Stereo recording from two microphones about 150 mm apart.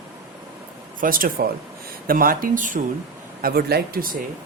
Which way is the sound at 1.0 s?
70° right (ahead or behind).